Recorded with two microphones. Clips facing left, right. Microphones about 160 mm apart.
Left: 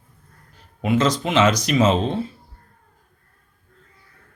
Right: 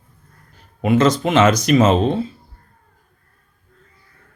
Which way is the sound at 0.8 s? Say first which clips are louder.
Right 4 dB; 50° right (ahead or behind).